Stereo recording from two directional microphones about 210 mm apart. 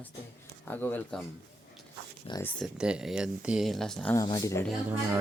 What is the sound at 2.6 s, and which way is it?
Speech, 5° right (ahead or behind).